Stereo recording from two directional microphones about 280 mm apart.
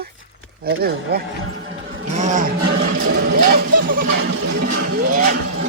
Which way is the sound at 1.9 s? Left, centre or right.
Right.